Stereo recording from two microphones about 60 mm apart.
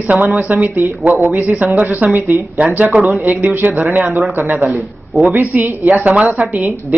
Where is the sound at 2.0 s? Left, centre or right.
Right.